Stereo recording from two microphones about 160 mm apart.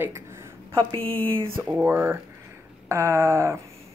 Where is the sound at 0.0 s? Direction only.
15° right (ahead or behind).